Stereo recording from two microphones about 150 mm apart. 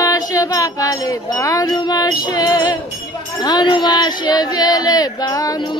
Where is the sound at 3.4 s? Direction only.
30° left (ahead or behind).